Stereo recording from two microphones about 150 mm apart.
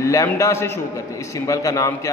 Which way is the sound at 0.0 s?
20° left (ahead or behind).